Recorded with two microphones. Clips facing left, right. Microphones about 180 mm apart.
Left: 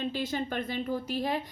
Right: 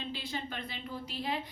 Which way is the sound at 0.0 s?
45° left (ahead or behind).